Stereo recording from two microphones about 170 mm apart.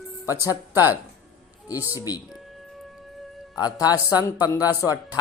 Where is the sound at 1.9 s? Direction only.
20° left (ahead or behind).